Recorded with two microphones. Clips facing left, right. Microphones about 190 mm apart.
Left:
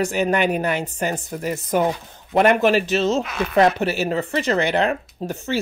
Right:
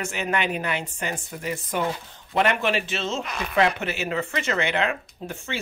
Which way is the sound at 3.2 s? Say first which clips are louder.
Left 6 dB; centre (ahead or behind).